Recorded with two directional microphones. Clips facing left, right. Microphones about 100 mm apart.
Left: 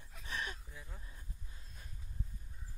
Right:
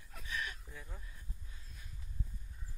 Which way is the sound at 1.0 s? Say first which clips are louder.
Even; 30° left (ahead or behind).